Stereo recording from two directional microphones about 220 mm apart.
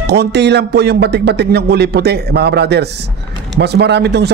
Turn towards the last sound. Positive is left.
turn(degrees=-50)  # may be behind; listen again after turning